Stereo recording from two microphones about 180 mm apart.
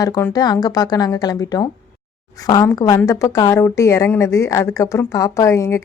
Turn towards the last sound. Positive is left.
turn(degrees=15)  # may be behind; listen again after turning